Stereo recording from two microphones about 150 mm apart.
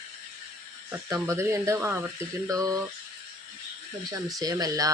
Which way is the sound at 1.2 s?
20° right (ahead or behind).